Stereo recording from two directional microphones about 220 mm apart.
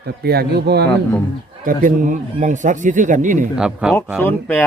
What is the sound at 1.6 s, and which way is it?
A man's voice, 35° right (ahead or behind).